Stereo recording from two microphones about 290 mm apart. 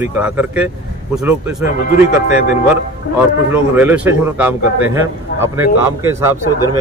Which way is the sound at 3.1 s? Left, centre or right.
Centre.